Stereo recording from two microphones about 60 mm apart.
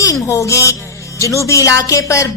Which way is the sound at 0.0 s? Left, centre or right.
Left.